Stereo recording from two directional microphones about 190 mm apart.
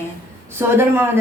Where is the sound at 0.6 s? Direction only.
10° right (ahead or behind).